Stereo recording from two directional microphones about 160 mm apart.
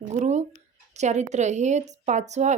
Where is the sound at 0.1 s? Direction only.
45° right (ahead or behind).